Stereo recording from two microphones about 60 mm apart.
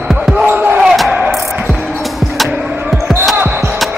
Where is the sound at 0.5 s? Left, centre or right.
Right.